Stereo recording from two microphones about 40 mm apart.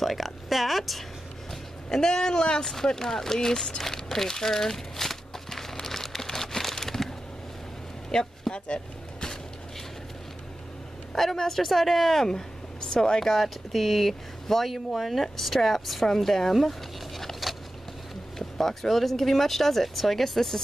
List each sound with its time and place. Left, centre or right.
0.0 s speech: centre
1.5 s speech: centre
2.6 s speech: centre
2.9 s a sound: centre
8.1 s speech: centre
11.3 s speech: centre
13.3 s speech: centre
17.2 s vehicle: centre
18.6 s speech: centre